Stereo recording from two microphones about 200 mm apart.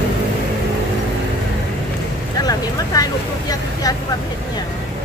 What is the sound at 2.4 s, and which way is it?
Vehicle, 20° left (ahead or behind).